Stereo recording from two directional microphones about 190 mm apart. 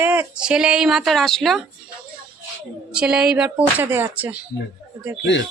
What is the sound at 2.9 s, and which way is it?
Speech, 5° right (ahead or behind).